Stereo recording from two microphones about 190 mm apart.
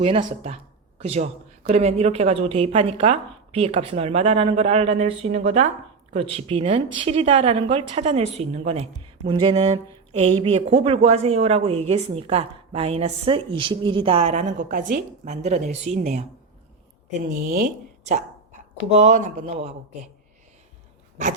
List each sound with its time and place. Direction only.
0.0 s speech: 30° right (ahead or behind)
17.2 s speech: 45° right (ahead or behind)